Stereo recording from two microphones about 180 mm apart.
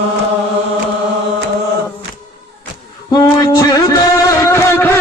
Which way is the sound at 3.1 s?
25° left (ahead or behind).